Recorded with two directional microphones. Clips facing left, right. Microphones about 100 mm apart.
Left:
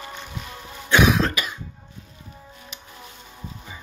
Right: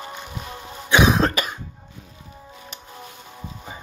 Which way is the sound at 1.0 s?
35° right (ahead or behind).